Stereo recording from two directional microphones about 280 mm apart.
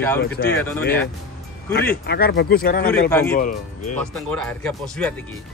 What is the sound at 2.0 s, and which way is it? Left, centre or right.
Speech, left.